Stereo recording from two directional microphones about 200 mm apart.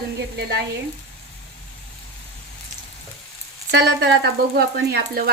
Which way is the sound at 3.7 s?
60° right (ahead or behind).